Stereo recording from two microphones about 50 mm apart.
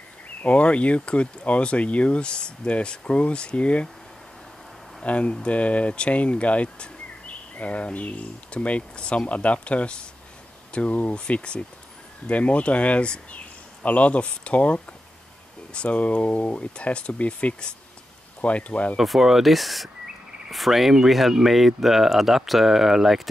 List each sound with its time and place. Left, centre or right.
0.4 s speech: left
5.0 s speech: left
18.9 s speech: centre